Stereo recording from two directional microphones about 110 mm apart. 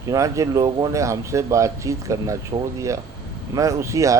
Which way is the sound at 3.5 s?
30° right (ahead or behind).